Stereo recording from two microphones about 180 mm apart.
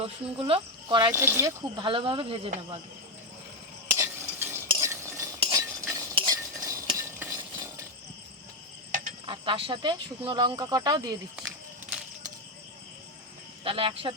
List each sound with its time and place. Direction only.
0.0 s speech: 30° right (ahead or behind)
1.8 s speech: 30° right (ahead or behind)
3.9 s stir: 15° right (ahead or behind)
8.9 s cricket: 50° right (ahead or behind)
9.2 s speech: 30° right (ahead or behind)
13.7 s speech: 30° right (ahead or behind)